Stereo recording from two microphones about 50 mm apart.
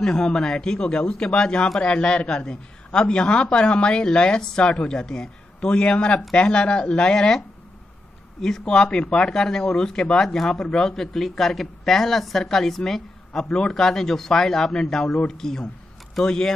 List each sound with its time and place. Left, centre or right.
0.0 s speech: centre